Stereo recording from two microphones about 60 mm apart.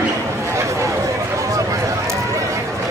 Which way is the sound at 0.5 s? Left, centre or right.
Right.